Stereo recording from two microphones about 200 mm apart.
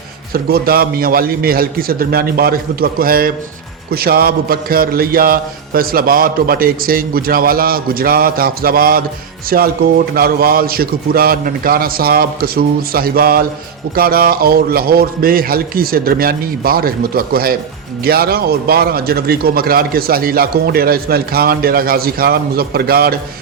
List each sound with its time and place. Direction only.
0.3 s a man's voice: 50° right (ahead or behind)